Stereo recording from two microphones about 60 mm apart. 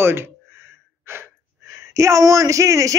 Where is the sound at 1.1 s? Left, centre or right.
Right.